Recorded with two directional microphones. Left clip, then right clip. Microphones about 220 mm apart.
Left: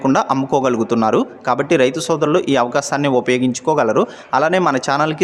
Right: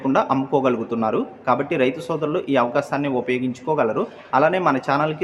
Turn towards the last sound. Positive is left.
turn(degrees=45)  # may be behind; listen again after turning